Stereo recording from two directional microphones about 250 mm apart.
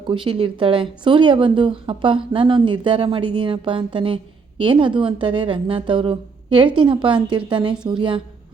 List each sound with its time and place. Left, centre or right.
0.1 s speech: centre